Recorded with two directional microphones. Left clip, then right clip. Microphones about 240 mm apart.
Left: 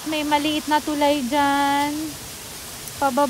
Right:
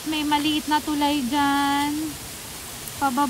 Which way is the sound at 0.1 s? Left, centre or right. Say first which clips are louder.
Left 1 dB; centre.